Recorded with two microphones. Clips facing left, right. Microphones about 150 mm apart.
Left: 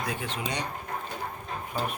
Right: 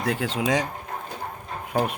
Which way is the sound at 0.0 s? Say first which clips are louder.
Right 7 dB; 90° right.